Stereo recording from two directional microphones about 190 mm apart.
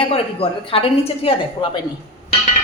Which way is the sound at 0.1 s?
30° left (ahead or behind).